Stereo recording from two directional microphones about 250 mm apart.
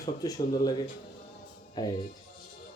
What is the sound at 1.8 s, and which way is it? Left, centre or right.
Speech, centre.